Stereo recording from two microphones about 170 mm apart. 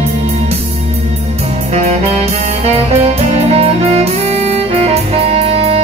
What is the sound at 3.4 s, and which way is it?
Music, 40° right (ahead or behind).